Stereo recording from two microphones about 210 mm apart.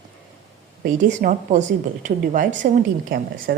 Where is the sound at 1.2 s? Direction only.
35° right (ahead or behind).